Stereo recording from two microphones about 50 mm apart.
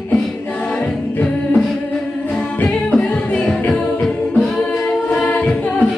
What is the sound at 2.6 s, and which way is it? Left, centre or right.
Music, left.